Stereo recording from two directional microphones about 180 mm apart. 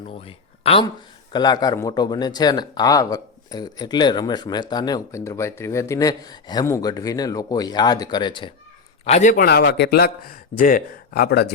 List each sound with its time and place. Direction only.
0.0 s a man's voice: 30° left (ahead or behind)
9.0 s a man's voice: 40° left (ahead or behind)
9.3 s speech: 60° left (ahead or behind)